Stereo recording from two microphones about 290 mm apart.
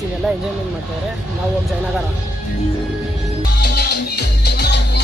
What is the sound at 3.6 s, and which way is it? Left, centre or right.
Music, left.